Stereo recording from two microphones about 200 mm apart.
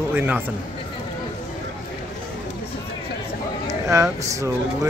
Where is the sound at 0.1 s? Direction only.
10° right (ahead or behind).